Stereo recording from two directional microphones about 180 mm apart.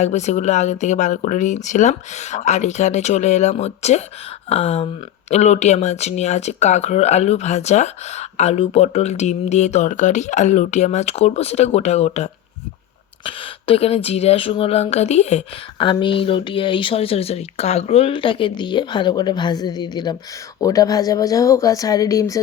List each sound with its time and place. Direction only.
0.0 s speech: 40° left (ahead or behind); by 22.4 s 20° left (ahead or behind)